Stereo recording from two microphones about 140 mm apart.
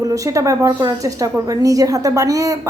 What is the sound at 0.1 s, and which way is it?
A woman's voice, 25° right (ahead or behind).